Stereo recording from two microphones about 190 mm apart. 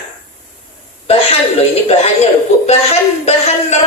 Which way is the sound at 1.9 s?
35° left (ahead or behind).